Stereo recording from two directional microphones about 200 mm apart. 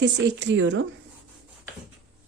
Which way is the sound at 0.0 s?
60° right (ahead or behind).